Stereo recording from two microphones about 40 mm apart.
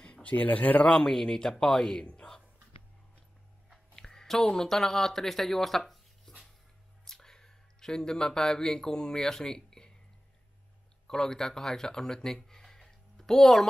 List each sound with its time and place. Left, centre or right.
0.0 s speech: left
0.8 s speech: centre
2.1 s whispering: centre
3.9 s speech: centre
11.1 s speech: centre